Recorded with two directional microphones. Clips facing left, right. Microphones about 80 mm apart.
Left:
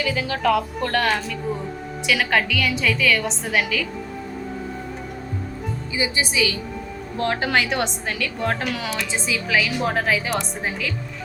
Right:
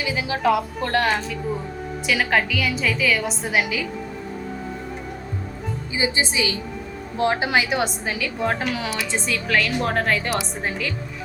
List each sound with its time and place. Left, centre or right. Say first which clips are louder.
0.0 s a woman's voice: even; centre
5.9 s a woman's voice: right 1 dB; right
7.2 s speech: right 1 dB; centre